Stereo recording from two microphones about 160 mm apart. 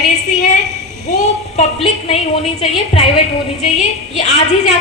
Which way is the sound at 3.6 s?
45° left (ahead or behind).